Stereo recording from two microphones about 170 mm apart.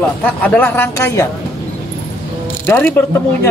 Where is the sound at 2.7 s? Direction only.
10° left (ahead or behind).